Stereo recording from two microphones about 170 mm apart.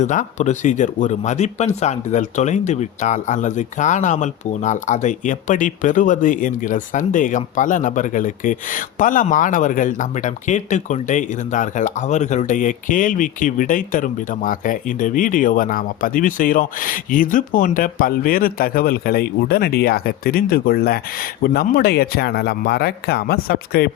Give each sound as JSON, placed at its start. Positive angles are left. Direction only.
{"t": 0.0, "sound": "speech", "side_deg": 45}